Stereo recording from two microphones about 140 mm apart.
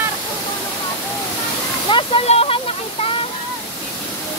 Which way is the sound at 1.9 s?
35° left (ahead or behind).